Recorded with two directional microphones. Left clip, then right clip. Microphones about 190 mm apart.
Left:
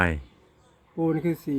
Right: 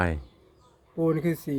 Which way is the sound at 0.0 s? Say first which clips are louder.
Left 3 dB; centre (ahead or behind).